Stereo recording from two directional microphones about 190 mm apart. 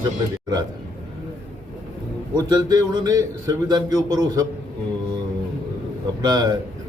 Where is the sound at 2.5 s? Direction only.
20° right (ahead or behind).